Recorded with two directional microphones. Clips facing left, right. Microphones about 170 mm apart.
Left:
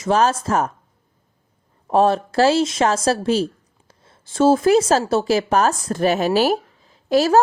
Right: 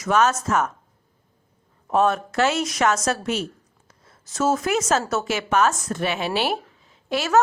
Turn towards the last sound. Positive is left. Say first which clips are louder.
# left 5 dB
turn(degrees=35)  # may be behind; listen again after turning